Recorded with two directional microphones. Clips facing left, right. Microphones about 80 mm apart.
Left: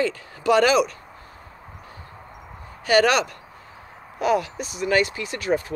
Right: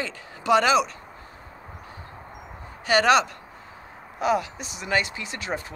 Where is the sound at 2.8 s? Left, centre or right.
Right.